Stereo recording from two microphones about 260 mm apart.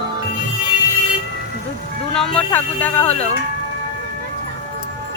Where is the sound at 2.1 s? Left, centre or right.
Centre.